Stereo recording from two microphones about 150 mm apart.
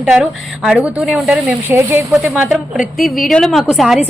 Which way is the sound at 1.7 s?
15° right (ahead or behind).